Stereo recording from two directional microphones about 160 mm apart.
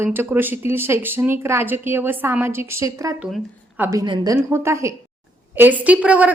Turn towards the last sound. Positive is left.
turn(degrees=-10)  # may be behind; listen again after turning